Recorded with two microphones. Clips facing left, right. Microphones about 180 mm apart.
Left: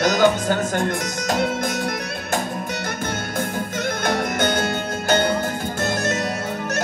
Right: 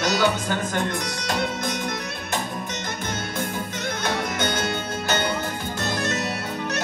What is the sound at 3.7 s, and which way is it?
Music, 50° left (ahead or behind).